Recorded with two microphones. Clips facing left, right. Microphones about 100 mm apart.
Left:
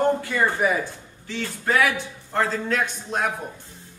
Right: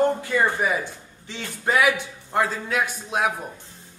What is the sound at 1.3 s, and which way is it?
A man's voice, 15° right (ahead or behind).